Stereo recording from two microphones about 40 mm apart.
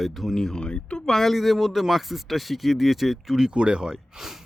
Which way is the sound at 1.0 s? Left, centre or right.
Centre.